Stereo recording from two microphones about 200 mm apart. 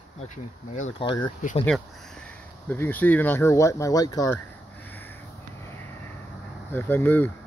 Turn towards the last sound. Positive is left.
turn(degrees=10)  # may be behind; listen again after turning